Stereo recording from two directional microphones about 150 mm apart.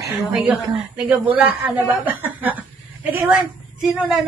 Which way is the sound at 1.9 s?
10° right (ahead or behind).